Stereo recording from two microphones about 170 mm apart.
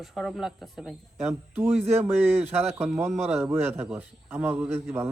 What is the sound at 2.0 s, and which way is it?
A man's voice, 10° right (ahead or behind).